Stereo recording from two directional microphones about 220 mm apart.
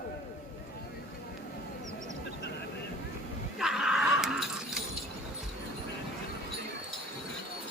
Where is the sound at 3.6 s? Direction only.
Centre (ahead or behind).